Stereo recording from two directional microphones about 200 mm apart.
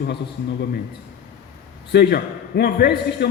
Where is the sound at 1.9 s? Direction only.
55° left (ahead or behind).